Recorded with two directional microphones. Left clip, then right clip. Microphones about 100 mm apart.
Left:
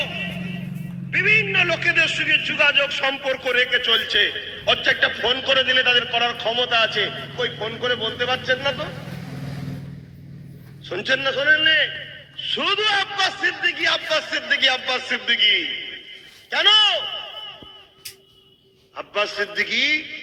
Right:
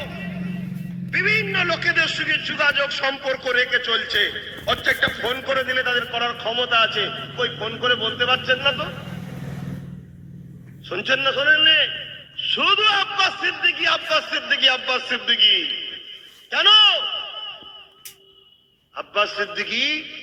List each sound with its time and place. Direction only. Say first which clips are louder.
0.0 s vehicle: left 6 dB; 30° left (ahead or behind)
1.1 s a man's voice: left 2 dB; 30° left (ahead or behind); by 9.0 s 10° left (ahead or behind)
10.8 s a man's voice: right 1 dB; 10° left (ahead or behind)
16.5 s a sound: right 2 dB; 10° left (ahead or behind)
18.9 s a man's voice: right 1 dB; 10° left (ahead or behind)